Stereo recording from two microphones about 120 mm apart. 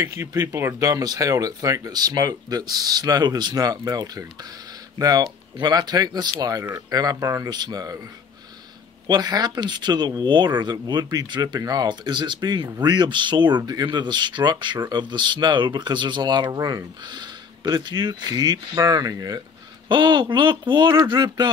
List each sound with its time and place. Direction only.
0.0 s speech: 25° right (ahead or behind)
9.0 s speech: 35° right (ahead or behind)